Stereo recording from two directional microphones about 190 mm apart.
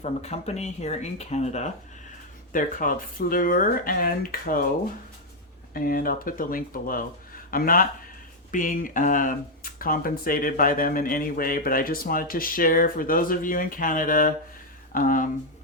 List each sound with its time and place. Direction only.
0.0 s speech: 35° left (ahead or behind)
5.7 s speech: 50° left (ahead or behind)